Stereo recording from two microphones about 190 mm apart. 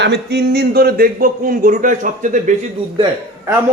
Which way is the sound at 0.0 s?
65° right (ahead or behind).